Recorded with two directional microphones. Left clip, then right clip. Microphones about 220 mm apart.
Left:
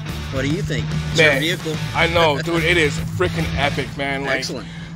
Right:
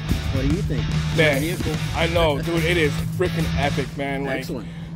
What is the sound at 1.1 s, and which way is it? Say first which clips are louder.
Speech: left 5 dB; 20° left (ahead or behind).